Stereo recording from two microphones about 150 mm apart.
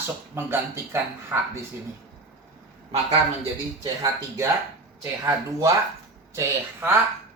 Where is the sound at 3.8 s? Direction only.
20° right (ahead or behind).